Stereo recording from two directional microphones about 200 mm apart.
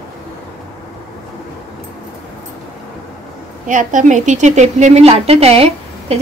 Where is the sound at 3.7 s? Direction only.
40° right (ahead or behind).